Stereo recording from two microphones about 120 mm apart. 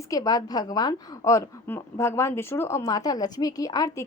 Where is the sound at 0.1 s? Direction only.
30° left (ahead or behind).